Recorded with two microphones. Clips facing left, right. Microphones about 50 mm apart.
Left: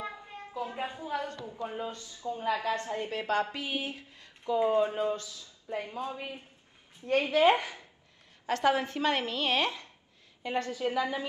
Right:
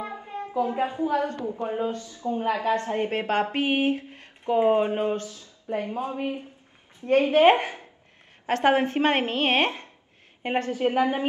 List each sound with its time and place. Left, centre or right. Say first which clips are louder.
0.0 s a woman's voice: right 7 dB; right